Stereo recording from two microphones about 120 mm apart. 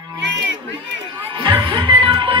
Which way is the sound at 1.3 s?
45° right (ahead or behind).